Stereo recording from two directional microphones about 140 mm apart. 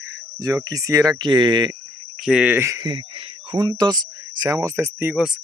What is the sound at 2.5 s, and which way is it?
Speech, 20° right (ahead or behind).